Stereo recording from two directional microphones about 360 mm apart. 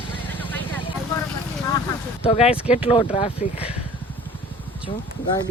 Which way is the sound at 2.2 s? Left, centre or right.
Centre.